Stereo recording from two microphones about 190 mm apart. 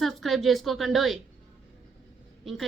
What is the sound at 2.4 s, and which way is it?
Speech, centre (ahead or behind).